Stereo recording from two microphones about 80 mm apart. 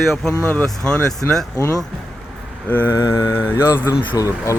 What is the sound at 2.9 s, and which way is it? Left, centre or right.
Mantra, left.